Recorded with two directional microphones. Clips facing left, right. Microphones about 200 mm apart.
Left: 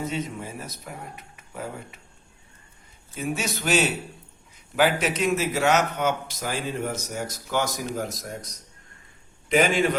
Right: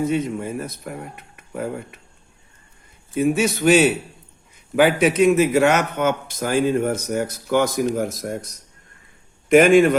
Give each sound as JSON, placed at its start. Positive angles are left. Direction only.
{"t": 0.1, "sound": "speech", "side_deg": -55}
{"t": 3.2, "sound": "a man's voice", "side_deg": -55}